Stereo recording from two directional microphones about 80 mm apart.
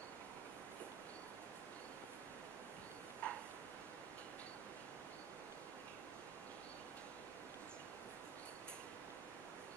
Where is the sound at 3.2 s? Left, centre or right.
Centre.